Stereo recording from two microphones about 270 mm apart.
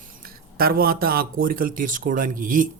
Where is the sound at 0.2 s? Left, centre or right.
Right.